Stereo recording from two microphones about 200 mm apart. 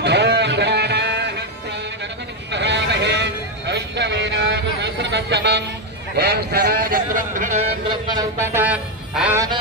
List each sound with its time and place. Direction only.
0.0 s music: 55° right (ahead or behind)
2.5 s sheep: 60° right (ahead or behind)
4.8 s a sound: 60° right (ahead or behind)
6.1 s speech: 55° right (ahead or behind)
7.9 s a man's voice: 20° right (ahead or behind)